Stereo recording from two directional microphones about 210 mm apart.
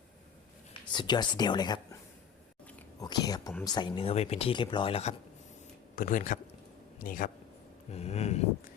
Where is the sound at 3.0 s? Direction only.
20° left (ahead or behind).